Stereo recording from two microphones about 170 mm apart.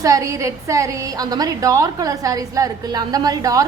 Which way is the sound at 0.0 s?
20° right (ahead or behind).